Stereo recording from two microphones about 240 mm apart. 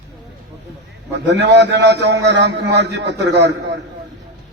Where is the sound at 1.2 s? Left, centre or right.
Right.